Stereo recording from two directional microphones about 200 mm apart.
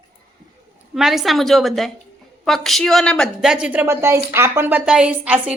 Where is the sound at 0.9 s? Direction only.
Centre (ahead or behind).